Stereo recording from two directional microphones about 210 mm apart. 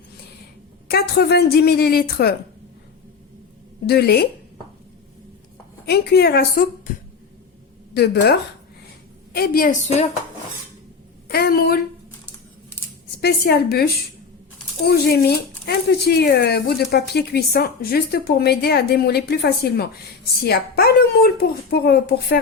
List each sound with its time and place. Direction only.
0.9 s a woman's voice: 50° left (ahead or behind)
3.8 s a woman's voice: 50° left (ahead or behind)
5.8 s a woman's voice: 50° left (ahead or behind)
7.9 s a woman's voice: 50° left (ahead or behind)
11.3 s a woman's voice: 45° left (ahead or behind)
13.2 s a woman's voice: 50° left (ahead or behind)